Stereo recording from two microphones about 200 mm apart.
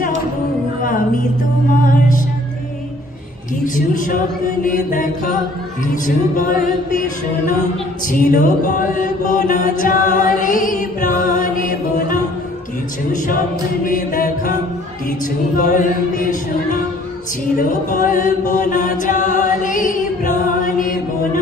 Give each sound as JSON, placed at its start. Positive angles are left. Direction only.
{"t": 1.9, "sound": "music", "side_deg": 40}
{"t": 3.6, "sound": "a woman's voice", "side_deg": 40}
{"t": 4.6, "sound": "mantra", "side_deg": 40}
{"t": 8.1, "sound": "mantra", "side_deg": 45}
{"t": 13.8, "sound": "mantra", "side_deg": 45}
{"t": 17.6, "sound": "chant", "side_deg": 40}